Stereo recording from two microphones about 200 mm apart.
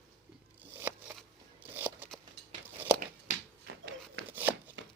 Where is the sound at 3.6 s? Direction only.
50° right (ahead or behind).